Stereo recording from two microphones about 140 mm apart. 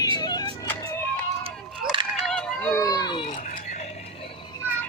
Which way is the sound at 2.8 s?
25° left (ahead or behind).